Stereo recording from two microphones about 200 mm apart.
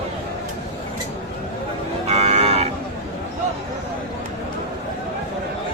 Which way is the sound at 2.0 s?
30° right (ahead or behind).